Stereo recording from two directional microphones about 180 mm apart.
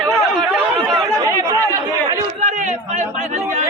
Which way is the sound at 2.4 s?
40° right (ahead or behind).